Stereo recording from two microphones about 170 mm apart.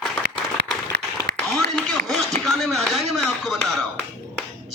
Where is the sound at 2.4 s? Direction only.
Centre (ahead or behind).